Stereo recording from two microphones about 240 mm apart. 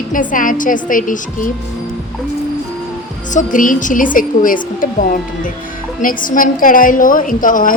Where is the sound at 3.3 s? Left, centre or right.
Left.